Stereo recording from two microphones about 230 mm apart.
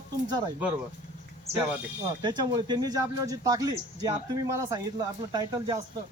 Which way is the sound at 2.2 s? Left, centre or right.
Centre.